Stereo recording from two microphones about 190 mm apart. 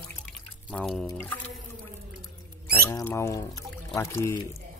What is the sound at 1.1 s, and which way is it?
Music, 10° left (ahead or behind).